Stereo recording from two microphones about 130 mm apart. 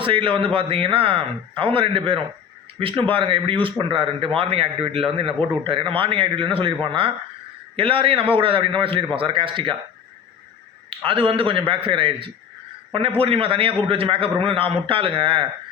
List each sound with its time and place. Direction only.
0.0 s a man's voice: 40° right (ahead or behind)
10.8 s a man's voice: 45° right (ahead or behind)